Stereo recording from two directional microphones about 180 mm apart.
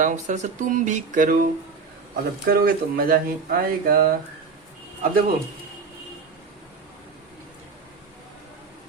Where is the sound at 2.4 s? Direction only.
60° right (ahead or behind).